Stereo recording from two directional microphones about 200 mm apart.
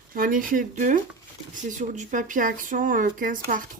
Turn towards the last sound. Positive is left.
turn(degrees=-40)  # may be behind; listen again after turning